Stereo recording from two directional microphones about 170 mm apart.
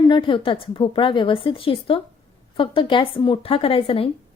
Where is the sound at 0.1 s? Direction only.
30° left (ahead or behind).